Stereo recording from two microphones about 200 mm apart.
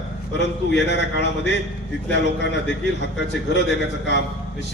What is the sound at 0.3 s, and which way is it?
A man's voice, 60° left (ahead or behind).